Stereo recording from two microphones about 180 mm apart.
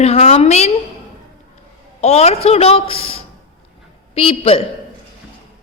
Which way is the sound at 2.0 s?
35° left (ahead or behind).